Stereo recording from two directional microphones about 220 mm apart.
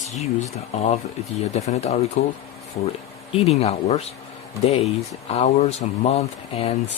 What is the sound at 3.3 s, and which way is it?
Speech, 30° left (ahead or behind).